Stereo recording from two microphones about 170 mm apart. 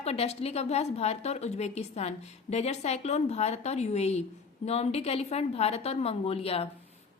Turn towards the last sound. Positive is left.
turn(degrees=35)  # may be behind; listen again after turning